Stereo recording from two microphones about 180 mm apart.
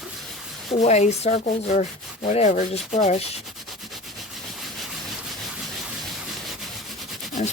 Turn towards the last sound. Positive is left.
turn(degrees=0)  # may be behind; listen again after turning